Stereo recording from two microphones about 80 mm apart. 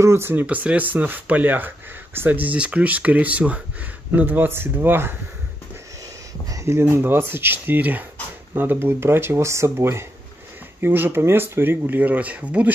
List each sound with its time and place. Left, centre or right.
0.0 s speech: right
6.5 s speech: right; by 12.7 s centre